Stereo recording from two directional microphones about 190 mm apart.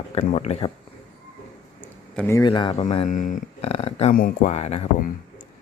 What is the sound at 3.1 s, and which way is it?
Speech, 40° left (ahead or behind).